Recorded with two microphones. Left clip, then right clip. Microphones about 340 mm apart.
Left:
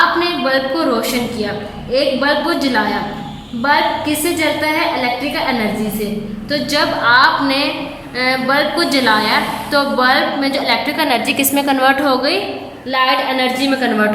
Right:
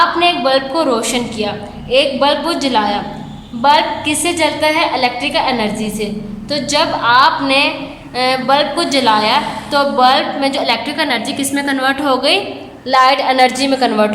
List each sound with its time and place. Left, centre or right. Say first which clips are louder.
0.2 s a woman's voice: right 3 dB; centre
6.5 s a woman's voice: right 1 dB; centre
12.9 s a woman's voice: right 4 dB; centre